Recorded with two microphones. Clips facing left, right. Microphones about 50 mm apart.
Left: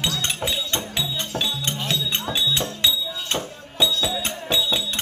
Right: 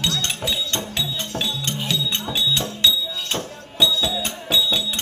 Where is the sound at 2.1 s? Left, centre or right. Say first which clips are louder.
Right 1 dB; left.